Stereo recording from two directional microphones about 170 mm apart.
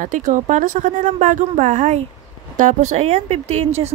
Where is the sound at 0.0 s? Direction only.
50° right (ahead or behind).